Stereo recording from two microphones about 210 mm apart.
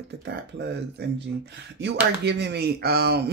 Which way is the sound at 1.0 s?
50° right (ahead or behind).